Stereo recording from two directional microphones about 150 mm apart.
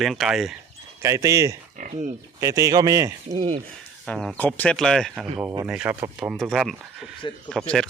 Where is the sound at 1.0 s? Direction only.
20° right (ahead or behind).